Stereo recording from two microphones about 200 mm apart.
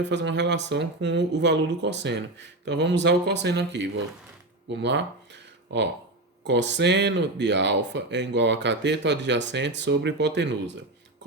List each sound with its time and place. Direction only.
0.0 s speech: 60° right (ahead or behind)